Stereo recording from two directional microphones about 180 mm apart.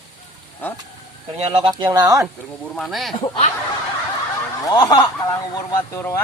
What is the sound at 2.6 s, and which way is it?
Speech, centre (ahead or behind).